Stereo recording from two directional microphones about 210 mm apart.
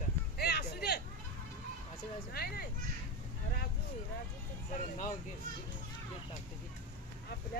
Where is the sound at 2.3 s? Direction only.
50° left (ahead or behind).